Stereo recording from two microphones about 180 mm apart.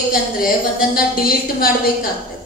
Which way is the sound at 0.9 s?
55° left (ahead or behind).